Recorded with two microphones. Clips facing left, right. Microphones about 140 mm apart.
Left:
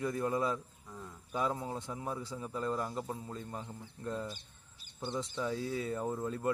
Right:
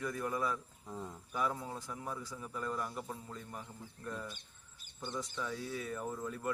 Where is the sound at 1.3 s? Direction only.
20° left (ahead or behind).